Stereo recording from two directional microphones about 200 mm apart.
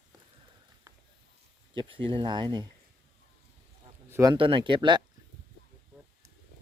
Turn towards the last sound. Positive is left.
turn(degrees=-25)  # may be behind; listen again after turning